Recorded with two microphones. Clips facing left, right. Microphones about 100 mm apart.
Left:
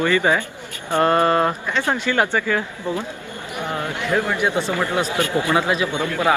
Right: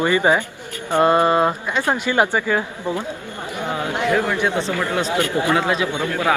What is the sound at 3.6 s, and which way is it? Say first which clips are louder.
Speech: right 3 dB; 15° right (ahead or behind).